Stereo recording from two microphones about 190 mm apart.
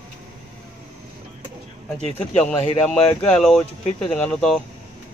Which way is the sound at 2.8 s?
5° left (ahead or behind).